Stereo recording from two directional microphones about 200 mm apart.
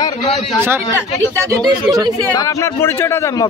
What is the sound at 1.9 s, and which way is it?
Speech, centre (ahead or behind).